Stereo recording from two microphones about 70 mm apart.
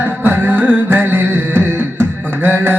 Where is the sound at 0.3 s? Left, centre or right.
Right.